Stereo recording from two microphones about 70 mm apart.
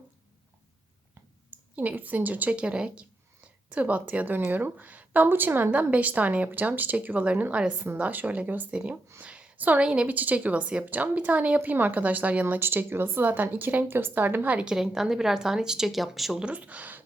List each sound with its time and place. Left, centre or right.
1.7 s a woman's voice: right
14.5 s a woman's voice: centre
16.4 s a woman's voice: centre